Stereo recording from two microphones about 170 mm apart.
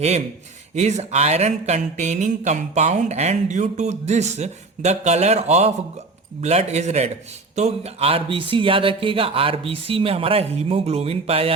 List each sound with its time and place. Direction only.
0.8 s speech: 40° right (ahead or behind)